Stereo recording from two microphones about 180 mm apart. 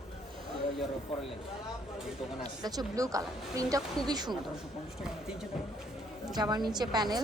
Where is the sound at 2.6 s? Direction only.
20° right (ahead or behind).